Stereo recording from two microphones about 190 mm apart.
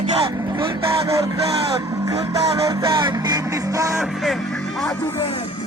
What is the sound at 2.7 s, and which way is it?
Music, 25° right (ahead or behind).